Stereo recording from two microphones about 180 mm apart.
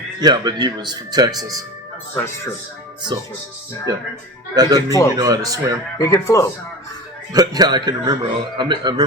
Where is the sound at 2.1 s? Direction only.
15° left (ahead or behind).